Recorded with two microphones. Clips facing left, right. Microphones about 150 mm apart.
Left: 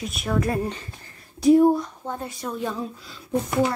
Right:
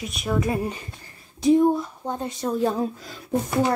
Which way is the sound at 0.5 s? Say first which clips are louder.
Even; 10° right (ahead or behind).